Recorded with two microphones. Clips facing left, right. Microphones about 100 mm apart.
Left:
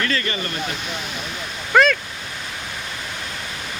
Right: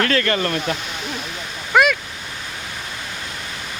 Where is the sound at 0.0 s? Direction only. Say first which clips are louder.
Right 5 dB; 65° right (ahead or behind); by 0.6 s 80° right.